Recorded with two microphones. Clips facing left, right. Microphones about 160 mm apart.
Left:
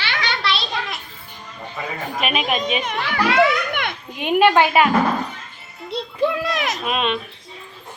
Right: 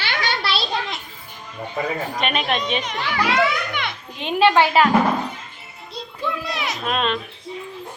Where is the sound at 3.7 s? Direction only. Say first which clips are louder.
Left 2 dB; 50° left (ahead or behind).